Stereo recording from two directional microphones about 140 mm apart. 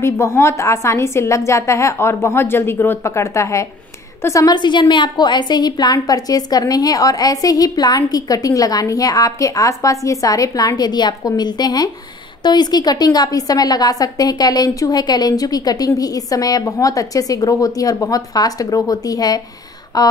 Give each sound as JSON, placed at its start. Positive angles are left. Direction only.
{"t": 0.0, "sound": "a woman's voice", "side_deg": 20}